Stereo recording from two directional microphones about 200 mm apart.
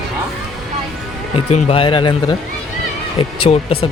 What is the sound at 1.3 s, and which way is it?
Speech, 30° left (ahead or behind).